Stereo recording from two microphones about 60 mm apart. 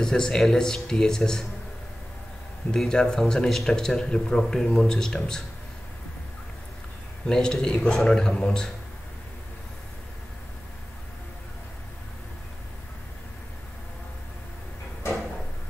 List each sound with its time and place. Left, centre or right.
0.0 s speech: centre
2.7 s speech: centre
7.2 s speech: centre